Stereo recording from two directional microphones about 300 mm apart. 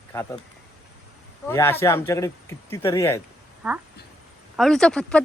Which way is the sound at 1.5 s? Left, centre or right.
Centre.